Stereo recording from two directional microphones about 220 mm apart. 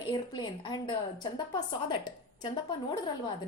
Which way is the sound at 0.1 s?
20° left (ahead or behind).